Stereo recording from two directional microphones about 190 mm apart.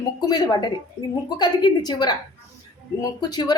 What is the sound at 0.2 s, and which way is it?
A woman's voice, 20° left (ahead or behind).